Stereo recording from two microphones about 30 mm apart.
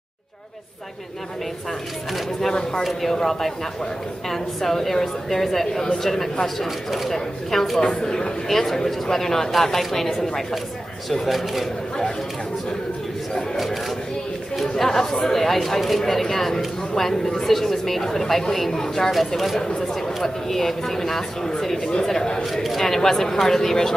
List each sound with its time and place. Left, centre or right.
2.8 s speech: centre
8.0 s speech: left
8.5 s speech: centre
11.2 s speech: centre
14.6 s speech: centre
19.1 s speech: centre
22.4 s speech: centre
22.8 s speech: centre